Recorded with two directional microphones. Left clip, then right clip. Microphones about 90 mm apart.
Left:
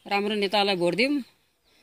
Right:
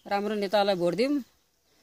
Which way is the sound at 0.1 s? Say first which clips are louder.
Left 2 dB; 30° right (ahead or behind).